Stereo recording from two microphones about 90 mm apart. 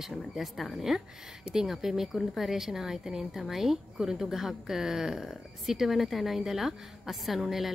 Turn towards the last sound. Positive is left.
turn(degrees=0)  # may be behind; listen again after turning